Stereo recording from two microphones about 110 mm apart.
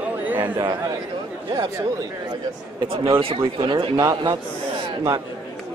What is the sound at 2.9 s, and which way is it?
Speech, 55° right (ahead or behind).